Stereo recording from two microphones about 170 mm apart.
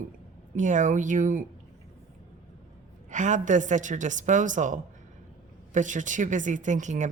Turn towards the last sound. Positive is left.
turn(degrees=-45)  # may be behind; listen again after turning